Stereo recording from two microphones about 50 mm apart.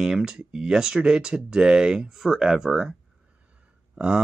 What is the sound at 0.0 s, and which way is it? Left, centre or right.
Speech, centre.